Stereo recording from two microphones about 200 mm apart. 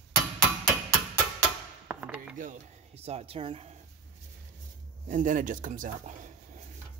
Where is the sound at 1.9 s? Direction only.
5° right (ahead or behind).